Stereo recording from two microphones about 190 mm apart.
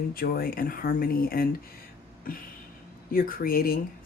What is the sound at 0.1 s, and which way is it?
Speech, 50° left (ahead or behind).